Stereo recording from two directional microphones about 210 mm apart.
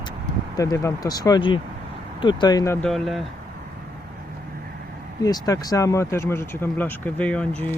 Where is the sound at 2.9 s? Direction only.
Centre (ahead or behind).